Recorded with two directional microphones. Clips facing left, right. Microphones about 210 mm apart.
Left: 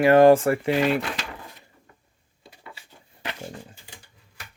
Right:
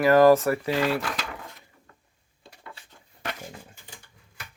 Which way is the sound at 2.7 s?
5° left (ahead or behind).